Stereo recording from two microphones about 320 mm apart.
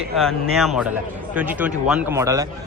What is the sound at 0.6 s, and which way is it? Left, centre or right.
A man's voice, centre.